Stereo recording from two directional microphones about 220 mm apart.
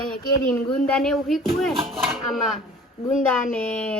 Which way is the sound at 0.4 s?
5° left (ahead or behind).